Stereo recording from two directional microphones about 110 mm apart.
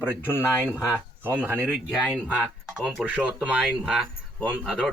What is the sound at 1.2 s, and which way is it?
Speech, 15° right (ahead or behind).